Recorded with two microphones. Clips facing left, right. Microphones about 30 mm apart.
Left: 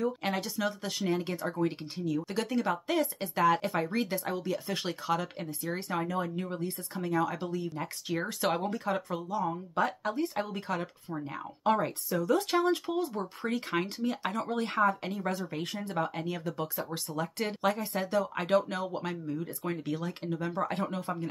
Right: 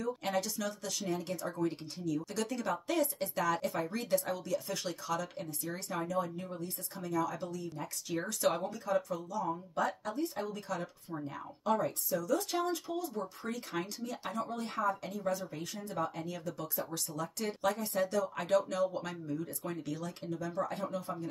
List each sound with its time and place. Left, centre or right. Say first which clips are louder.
0.0 s speech: left 3 dB; left
3.4 s speech: left 8 dB; left
4.1 s speech: even; left
4.6 s speech: left 5 dB; left
8.6 s speech: left 2 dB; left
9.3 s speech: left 5 dB; left